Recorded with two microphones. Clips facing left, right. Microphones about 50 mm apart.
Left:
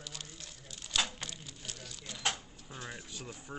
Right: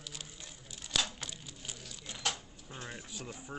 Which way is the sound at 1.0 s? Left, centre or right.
Centre.